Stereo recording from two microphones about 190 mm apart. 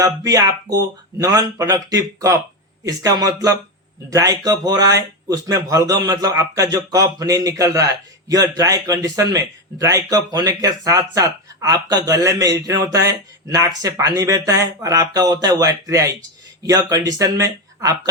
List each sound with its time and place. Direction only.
0.3 s a man's voice: 20° right (ahead or behind)